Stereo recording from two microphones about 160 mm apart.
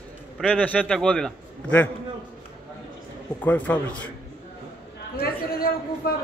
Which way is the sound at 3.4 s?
10° left (ahead or behind).